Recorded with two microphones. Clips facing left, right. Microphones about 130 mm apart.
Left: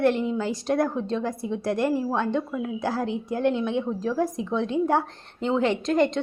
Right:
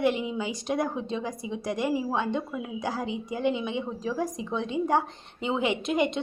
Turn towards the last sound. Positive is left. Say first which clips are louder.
# left 4 dB
turn(degrees=-5)  # may be behind; listen again after turning